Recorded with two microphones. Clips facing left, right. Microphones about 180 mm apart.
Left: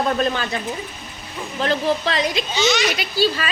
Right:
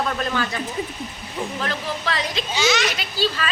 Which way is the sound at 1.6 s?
25° left (ahead or behind).